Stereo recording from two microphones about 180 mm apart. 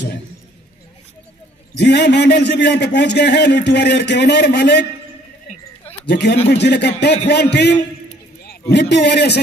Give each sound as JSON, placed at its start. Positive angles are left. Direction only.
{"t": 1.8, "sound": "a man's voice", "side_deg": 70}
{"t": 6.0, "sound": "a man's voice", "side_deg": 65}